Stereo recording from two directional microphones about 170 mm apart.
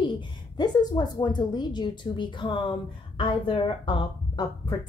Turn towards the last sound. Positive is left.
turn(degrees=25)  # may be behind; listen again after turning